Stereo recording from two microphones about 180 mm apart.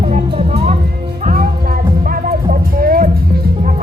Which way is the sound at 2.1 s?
55° right (ahead or behind).